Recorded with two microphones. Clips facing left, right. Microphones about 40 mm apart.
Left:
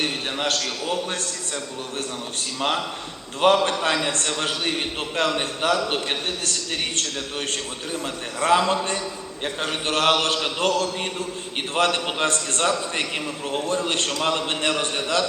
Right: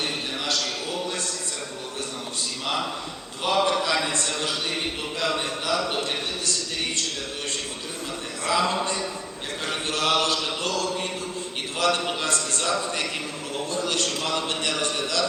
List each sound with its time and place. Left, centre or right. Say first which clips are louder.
0.0 s a sound: left 4 dB; left
2.6 s a man's voice: left 4 dB; left
8.4 s a man's voice: left 4 dB; left